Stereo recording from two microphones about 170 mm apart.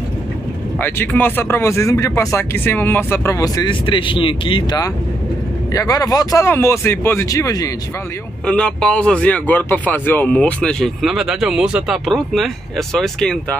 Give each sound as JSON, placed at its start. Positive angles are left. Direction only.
{"t": 0.7, "sound": "speech", "side_deg": 10}
{"t": 8.5, "sound": "speech", "side_deg": 5}